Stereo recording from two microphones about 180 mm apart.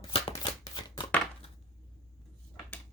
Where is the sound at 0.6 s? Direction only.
25° left (ahead or behind).